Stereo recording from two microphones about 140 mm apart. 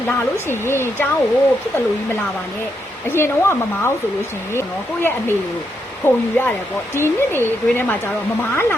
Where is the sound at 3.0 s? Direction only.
15° left (ahead or behind).